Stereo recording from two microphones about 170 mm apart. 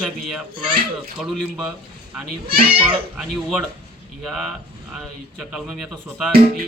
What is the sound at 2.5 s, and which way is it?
Speech, 30° right (ahead or behind).